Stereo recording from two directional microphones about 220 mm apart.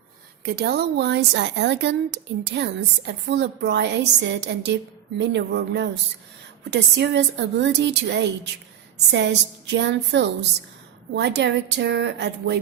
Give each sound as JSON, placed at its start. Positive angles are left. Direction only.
{"t": 0.4, "sound": "a woman's voice", "side_deg": -50}